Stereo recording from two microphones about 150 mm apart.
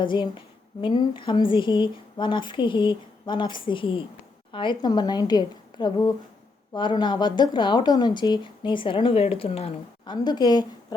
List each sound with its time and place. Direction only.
0.0 s a woman's voice: 35° left (ahead or behind)
10.2 s a woman's voice: 25° left (ahead or behind)